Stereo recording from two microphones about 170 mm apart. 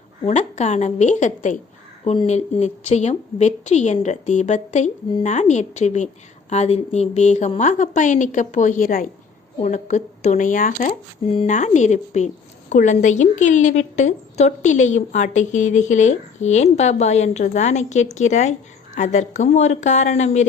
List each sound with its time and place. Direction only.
0.3 s a woman's voice: 40° left (ahead or behind)